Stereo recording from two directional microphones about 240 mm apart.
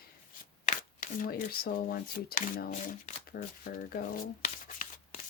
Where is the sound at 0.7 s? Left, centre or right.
Left.